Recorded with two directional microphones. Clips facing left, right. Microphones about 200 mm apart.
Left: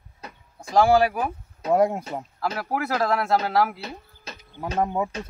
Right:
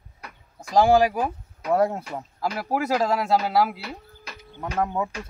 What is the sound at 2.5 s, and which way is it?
Speech, 15° right (ahead or behind).